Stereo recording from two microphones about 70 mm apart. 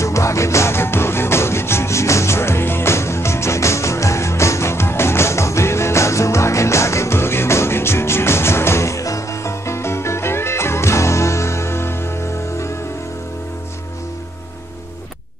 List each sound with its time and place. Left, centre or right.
0.0 s music: left